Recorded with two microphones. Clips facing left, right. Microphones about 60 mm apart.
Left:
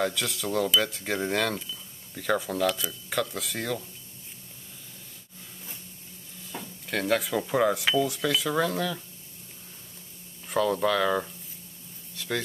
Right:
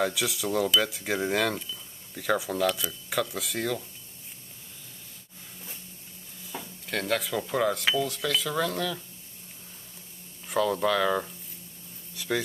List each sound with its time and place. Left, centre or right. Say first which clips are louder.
0.0 s mechanisms: right 1 dB; centre
6.4 s mechanisms: even; centre
10.5 s mechanisms: even; centre